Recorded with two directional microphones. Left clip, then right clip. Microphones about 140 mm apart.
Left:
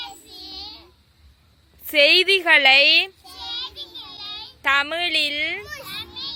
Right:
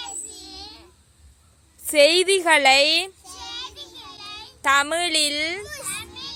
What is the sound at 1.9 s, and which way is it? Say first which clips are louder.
Speech: left 1 dB; 25° right (ahead or behind).